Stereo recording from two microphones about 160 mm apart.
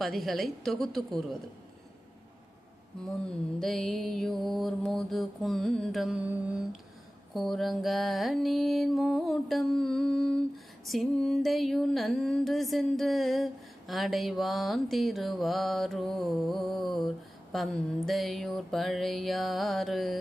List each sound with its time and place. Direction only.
0.0 s music: centre (ahead or behind)
3.6 s music: centre (ahead or behind)
7.3 s music: centre (ahead or behind)